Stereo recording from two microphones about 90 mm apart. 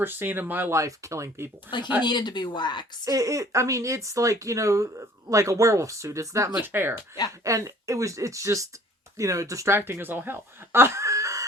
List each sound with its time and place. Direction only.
0.0 s speech: 25° right (ahead or behind)
0.8 s speech: 35° right (ahead or behind)
1.7 s speech: 20° right (ahead or behind)
2.0 s speech: 55° left (ahead or behind)
3.0 s speech: 40° right (ahead or behind)
6.6 s speech: 20° right (ahead or behind)
7.4 s speech: 35° right (ahead or behind)
9.7 s speech: 25° right (ahead or behind)